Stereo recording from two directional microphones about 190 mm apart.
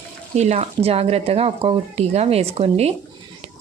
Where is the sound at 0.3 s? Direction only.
35° right (ahead or behind).